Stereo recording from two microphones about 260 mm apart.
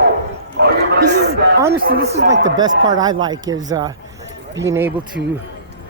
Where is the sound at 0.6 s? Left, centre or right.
Right.